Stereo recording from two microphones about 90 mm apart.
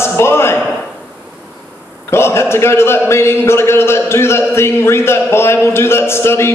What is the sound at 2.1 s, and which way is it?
A man's voice, 30° left (ahead or behind).